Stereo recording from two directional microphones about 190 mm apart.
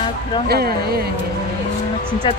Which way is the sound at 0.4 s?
55° right (ahead or behind).